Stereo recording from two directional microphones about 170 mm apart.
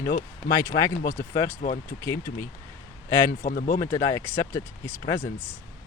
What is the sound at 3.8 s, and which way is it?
Speech, 20° left (ahead or behind).